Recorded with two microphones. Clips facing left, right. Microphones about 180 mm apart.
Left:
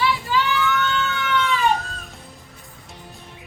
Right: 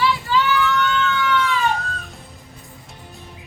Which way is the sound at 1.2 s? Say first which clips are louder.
Right 2 dB; 20° left (ahead or behind).